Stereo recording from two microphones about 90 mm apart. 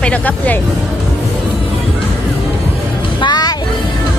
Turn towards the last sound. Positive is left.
turn(degrees=50)  # may be behind; listen again after turning